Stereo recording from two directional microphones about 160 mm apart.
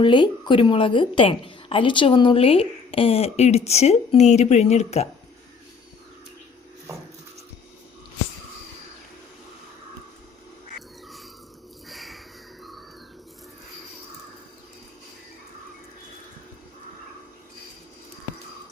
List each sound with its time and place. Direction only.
0.0 s a woman's voice: 30° left (ahead or behind)
10.8 s crow: centre (ahead or behind)